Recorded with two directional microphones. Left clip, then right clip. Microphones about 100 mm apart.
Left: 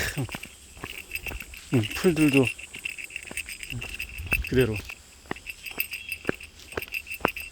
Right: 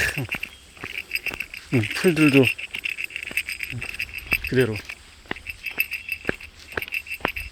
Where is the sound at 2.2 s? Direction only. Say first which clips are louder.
Right 5 dB; 25° right (ahead or behind).